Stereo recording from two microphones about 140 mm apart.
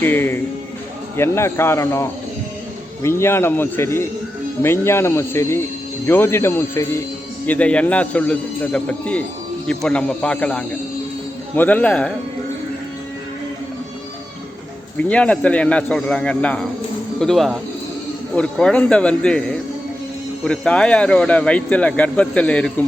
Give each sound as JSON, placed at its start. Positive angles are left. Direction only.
{"t": 0.0, "sound": "speech", "side_deg": 15}
{"t": 14.9, "sound": "speech", "side_deg": 10}